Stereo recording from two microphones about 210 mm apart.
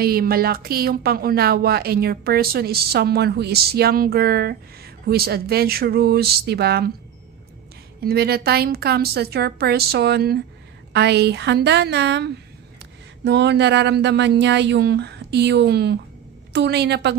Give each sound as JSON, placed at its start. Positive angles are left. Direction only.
{"t": 0.0, "sound": "a woman's voice", "side_deg": -45}
{"t": 8.0, "sound": "a woman's voice", "side_deg": -50}